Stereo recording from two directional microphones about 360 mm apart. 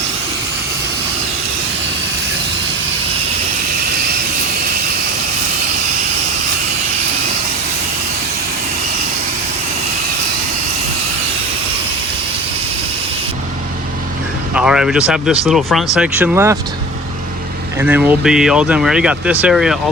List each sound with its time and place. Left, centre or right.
14.5 s speech: centre
17.7 s speech: centre